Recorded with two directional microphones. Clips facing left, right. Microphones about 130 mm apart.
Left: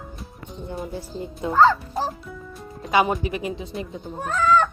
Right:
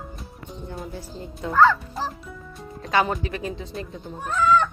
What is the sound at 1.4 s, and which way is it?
Speech, 20° left (ahead or behind).